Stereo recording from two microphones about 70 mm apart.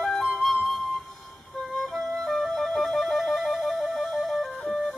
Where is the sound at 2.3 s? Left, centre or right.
Centre.